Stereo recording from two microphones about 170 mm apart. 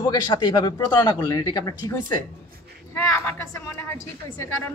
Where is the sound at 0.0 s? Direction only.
25° left (ahead or behind).